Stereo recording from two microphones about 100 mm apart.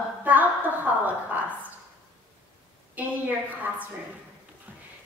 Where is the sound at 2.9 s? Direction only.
15° right (ahead or behind).